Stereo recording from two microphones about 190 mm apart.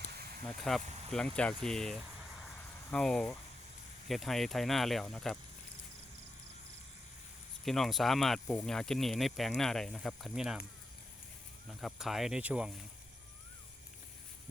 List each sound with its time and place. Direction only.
0.0 s a sound: 55° right (ahead or behind)
0.4 s speech: centre (ahead or behind)
0.8 s speech: 35° right (ahead or behind)
1.6 s speech: centre (ahead or behind)
7.6 s speech: centre (ahead or behind)
11.8 s speech: centre (ahead or behind)